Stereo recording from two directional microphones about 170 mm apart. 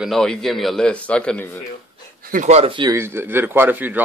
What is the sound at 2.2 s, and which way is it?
Speech, 50° right (ahead or behind).